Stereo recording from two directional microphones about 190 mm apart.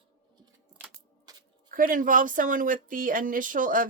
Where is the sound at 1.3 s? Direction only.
20° right (ahead or behind).